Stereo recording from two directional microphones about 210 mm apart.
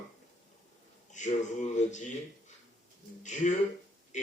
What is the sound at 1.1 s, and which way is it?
Speech, 35° left (ahead or behind).